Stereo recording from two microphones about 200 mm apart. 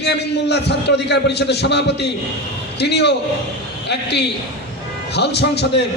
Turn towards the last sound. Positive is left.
turn(degrees=55)  # may be behind; listen again after turning